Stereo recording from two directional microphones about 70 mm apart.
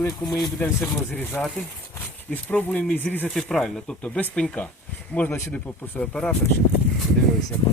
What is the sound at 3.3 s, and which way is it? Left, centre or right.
Speech, centre.